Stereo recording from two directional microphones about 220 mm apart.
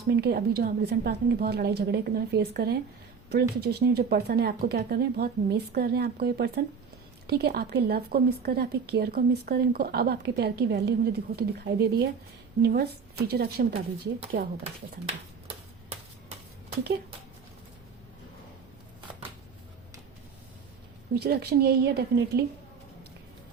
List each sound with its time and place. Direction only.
0.1 s a woman's voice: 45° right (ahead or behind)
21.1 s a woman's voice: 45° right (ahead or behind)